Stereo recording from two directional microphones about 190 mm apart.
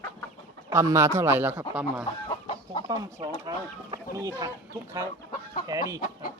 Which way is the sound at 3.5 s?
20° right (ahead or behind).